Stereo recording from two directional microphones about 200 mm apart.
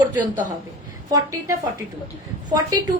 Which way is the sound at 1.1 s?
15° right (ahead or behind).